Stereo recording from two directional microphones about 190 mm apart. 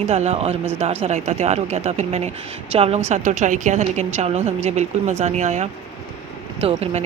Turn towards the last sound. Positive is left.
turn(degrees=-30)  # may be behind; listen again after turning